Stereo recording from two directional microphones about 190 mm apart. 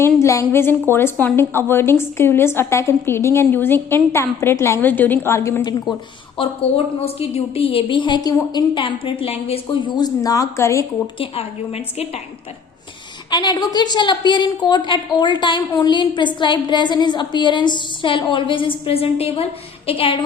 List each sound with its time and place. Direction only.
0.2 s a woman's voice: 15° left (ahead or behind)
6.3 s a woman's voice: 30° left (ahead or behind)
11.2 s a woman's voice: 30° left (ahead or behind)
13.3 s a woman's voice: 20° left (ahead or behind)